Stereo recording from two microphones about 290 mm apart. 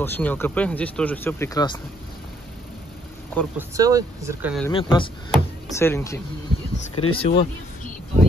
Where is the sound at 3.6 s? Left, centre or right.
Centre.